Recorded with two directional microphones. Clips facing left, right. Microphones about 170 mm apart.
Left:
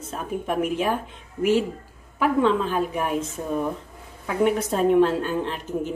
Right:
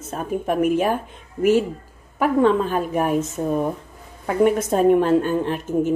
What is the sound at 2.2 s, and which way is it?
Speech, 45° right (ahead or behind).